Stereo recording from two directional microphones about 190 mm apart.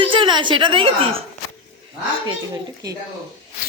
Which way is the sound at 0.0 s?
25° right (ahead or behind).